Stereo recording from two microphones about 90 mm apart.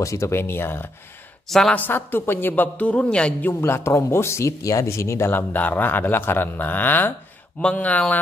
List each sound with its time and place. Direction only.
0.0 s a woman's voice: 35° left (ahead or behind)
1.5 s a woman's voice: 5° left (ahead or behind)
1.8 s a woman's voice: 25° left (ahead or behind)